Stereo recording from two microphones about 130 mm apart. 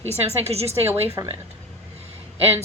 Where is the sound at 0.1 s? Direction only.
50° right (ahead or behind).